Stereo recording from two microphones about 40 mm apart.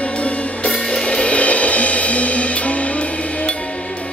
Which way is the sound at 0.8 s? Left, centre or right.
Centre.